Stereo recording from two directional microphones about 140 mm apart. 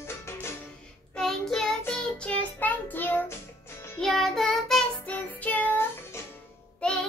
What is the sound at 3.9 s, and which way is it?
Child singing, 5° left (ahead or behind).